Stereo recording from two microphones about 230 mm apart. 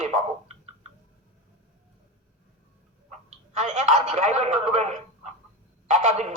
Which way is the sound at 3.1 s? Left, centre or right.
Right.